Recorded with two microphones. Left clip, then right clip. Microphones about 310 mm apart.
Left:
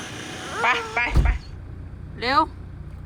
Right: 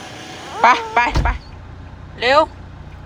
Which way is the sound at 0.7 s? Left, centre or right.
Centre.